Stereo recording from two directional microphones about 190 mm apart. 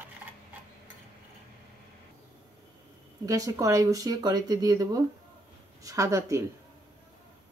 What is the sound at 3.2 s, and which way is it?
A woman's voice, 20° right (ahead or behind).